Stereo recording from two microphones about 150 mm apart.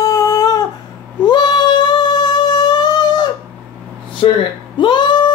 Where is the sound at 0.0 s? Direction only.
25° left (ahead or behind).